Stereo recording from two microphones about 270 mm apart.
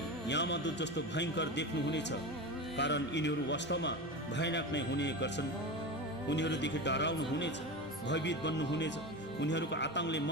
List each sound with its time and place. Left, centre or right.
0.3 s speech: left
6.3 s speech: left